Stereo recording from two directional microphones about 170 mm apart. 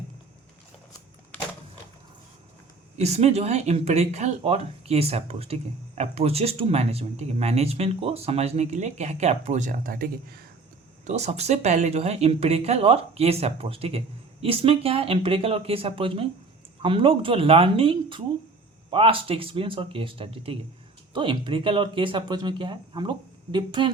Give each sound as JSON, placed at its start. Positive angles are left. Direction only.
{"t": 3.0, "sound": "speech", "side_deg": -40}
{"t": 11.0, "sound": "speech", "side_deg": -40}